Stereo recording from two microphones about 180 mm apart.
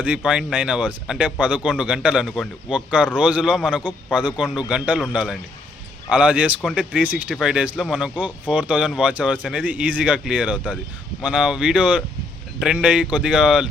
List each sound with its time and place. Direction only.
0.0 s speech: 5° right (ahead or behind)